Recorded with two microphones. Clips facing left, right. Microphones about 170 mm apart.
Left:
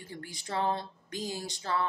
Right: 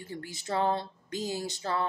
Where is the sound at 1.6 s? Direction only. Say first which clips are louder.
Left 1 dB; 40° right (ahead or behind).